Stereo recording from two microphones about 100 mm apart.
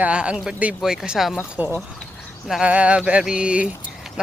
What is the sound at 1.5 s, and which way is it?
Speech, 15° right (ahead or behind).